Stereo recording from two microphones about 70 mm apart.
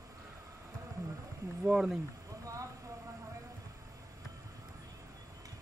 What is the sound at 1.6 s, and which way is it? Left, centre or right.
Speech, centre.